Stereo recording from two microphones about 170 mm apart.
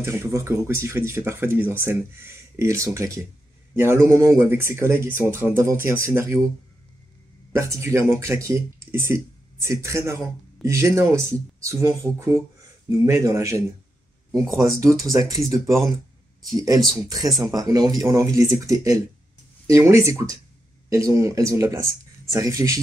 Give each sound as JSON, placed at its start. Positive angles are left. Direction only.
{"t": 0.0, "sound": "speech", "side_deg": -15}
{"t": 7.5, "sound": "speech", "side_deg": -15}